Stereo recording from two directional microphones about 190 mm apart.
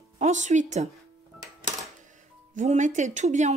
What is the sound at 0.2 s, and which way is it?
Speech, 40° right (ahead or behind).